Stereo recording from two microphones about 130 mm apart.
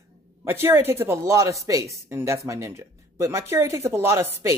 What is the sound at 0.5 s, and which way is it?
A woman's voice, 20° right (ahead or behind).